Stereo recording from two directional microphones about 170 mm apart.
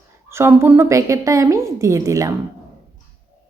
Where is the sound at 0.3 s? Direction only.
15° right (ahead or behind).